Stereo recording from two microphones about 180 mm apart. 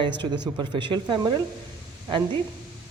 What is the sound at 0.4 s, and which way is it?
Speech, 25° right (ahead or behind).